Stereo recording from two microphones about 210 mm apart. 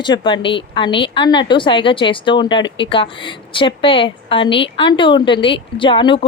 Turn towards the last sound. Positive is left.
turn(degrees=25)  # may be behind; listen again after turning